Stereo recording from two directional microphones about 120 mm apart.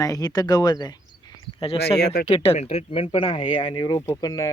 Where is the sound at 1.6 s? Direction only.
55° left (ahead or behind).